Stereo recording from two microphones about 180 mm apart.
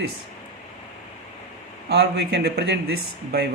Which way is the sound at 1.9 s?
65° right (ahead or behind).